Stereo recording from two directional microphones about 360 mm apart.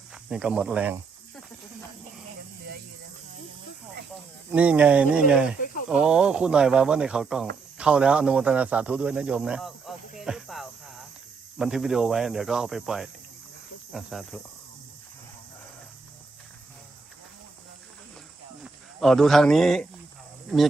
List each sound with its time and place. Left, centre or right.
0.1 s speech: centre
4.5 s a man's voice: centre
5.5 s speech: left
5.9 s a man's voice: centre
10.2 s cricket: centre
11.5 s a man's voice: centre
18.6 s speech: centre